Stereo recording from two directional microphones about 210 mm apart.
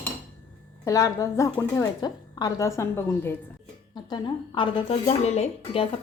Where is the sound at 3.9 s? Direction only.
20° left (ahead or behind).